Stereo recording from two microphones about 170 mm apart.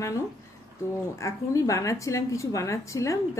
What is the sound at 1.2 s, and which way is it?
A woman's voice, 20° left (ahead or behind).